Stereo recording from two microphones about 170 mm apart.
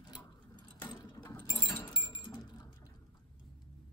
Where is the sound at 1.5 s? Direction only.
25° left (ahead or behind).